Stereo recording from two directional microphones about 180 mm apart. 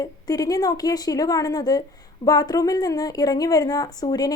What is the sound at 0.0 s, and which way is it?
A woman's voice, 20° left (ahead or behind).